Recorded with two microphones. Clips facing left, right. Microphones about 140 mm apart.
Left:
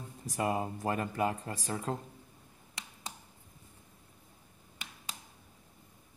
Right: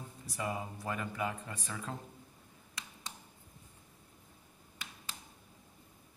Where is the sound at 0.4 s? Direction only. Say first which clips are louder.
Left 6 dB; 45° left (ahead or behind).